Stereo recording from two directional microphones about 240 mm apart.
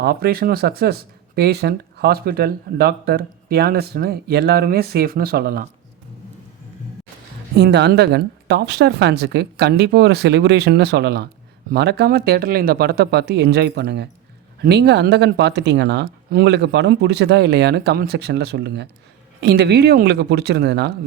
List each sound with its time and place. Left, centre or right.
0.0 s speech: right
7.6 s speech: right